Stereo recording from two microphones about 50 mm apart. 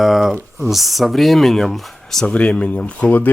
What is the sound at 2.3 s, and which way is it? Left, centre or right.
Speech, left.